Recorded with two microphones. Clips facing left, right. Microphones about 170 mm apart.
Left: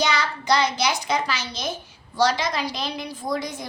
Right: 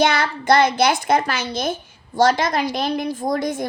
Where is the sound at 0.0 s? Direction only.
55° right (ahead or behind).